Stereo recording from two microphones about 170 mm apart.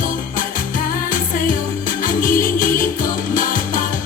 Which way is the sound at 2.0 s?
55° left (ahead or behind).